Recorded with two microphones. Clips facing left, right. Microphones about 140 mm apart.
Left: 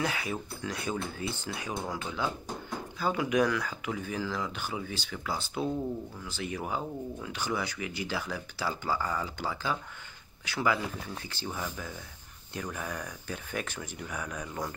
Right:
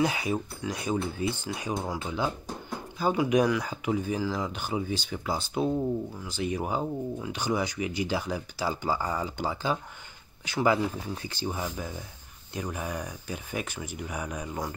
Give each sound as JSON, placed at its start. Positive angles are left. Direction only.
{"t": 0.0, "sound": "speech", "side_deg": -15}